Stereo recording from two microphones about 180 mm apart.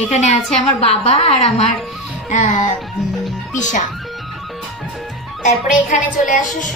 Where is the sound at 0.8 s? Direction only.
35° left (ahead or behind).